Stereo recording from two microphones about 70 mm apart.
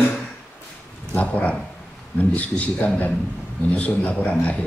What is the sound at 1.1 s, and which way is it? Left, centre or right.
Speech, left.